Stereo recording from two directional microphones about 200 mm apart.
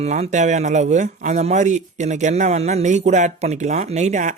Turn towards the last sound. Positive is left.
turn(degrees=-35)  # may be behind; listen again after turning